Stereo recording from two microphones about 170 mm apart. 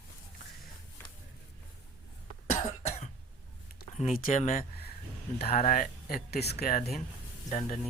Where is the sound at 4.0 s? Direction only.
45° left (ahead or behind).